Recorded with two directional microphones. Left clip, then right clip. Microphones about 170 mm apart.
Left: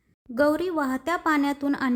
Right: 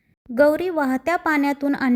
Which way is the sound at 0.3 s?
20° right (ahead or behind).